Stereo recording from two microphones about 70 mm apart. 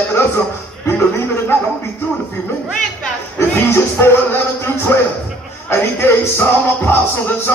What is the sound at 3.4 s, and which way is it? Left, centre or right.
A man's voice, left.